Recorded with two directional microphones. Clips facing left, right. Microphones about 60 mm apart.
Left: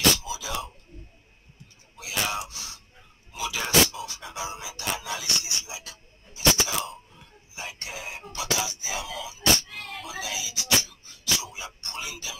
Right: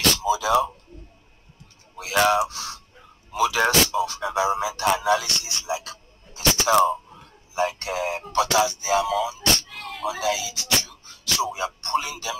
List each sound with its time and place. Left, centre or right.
0.3 s speech: right
2.0 s gasp: right
3.3 s music: right